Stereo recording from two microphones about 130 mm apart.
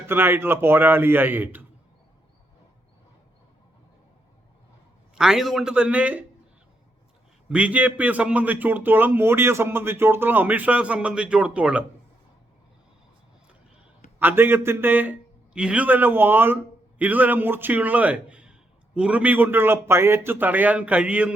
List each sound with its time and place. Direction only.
0.1 s a man's voice: 15° right (ahead or behind)
5.1 s a man's voice: 5° right (ahead or behind)
7.5 s a man's voice: 10° right (ahead or behind)
14.2 s a man's voice: 15° right (ahead or behind)